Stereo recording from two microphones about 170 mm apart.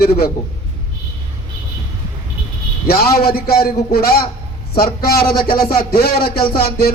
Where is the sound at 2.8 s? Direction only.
65° left (ahead or behind).